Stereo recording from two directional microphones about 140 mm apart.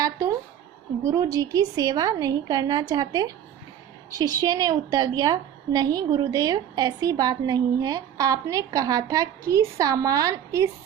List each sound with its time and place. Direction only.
1.0 s a woman's voice: 25° right (ahead or behind)